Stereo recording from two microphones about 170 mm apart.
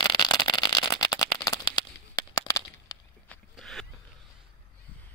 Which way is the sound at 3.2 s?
Centre (ahead or behind).